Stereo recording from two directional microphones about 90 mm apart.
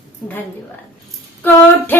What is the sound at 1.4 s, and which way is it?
Speech, 20° left (ahead or behind).